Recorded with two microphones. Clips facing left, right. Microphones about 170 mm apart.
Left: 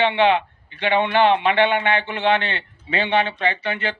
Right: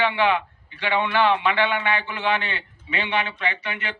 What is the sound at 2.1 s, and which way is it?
Speech, 70° left (ahead or behind).